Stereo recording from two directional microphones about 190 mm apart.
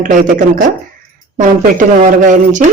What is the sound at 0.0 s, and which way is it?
Speech, 45° right (ahead or behind).